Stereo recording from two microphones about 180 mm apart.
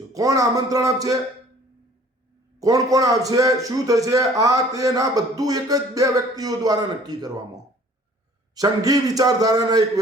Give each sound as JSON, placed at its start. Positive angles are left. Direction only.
{"t": 0.1, "sound": "a man's voice", "side_deg": -20}
{"t": 2.6, "sound": "a man's voice", "side_deg": -20}